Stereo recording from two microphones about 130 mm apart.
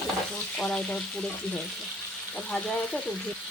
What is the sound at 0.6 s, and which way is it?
Speech, 5° left (ahead or behind).